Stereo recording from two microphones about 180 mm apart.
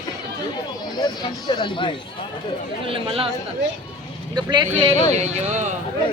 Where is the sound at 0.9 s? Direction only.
25° left (ahead or behind).